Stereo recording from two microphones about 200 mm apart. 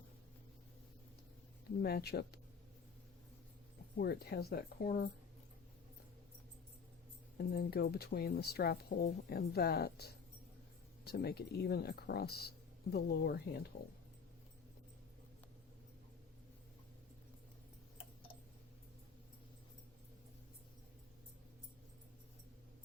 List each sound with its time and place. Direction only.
1.8 s speech: 50° left (ahead or behind)
3.9 s speech: 50° left (ahead or behind)
7.3 s speech: 50° left (ahead or behind)